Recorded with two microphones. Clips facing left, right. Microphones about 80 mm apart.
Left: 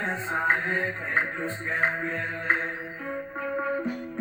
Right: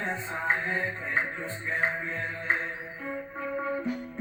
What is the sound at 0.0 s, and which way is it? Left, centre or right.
Music, left.